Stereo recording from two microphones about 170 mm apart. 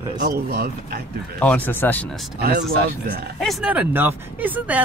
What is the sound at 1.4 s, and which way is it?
Speech, 10° left (ahead or behind).